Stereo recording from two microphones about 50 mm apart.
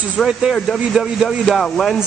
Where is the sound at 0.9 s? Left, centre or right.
Centre.